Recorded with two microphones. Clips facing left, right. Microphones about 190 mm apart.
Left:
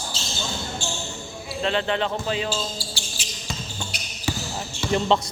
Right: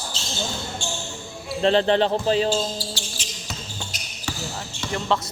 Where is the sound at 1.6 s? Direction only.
35° right (ahead or behind).